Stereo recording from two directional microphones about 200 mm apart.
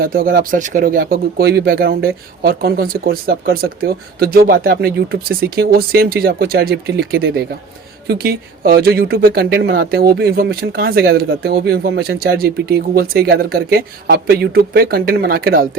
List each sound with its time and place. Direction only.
0.0 s speech: 50° right (ahead or behind)